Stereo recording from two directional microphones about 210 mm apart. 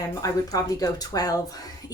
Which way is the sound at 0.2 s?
15° left (ahead or behind).